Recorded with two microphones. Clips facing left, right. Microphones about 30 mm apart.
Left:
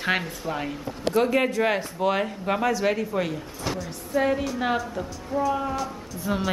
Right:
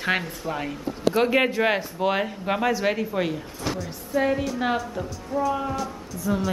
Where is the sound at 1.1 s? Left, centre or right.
Right.